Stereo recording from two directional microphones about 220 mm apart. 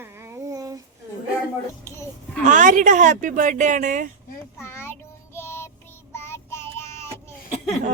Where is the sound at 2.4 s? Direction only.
35° right (ahead or behind).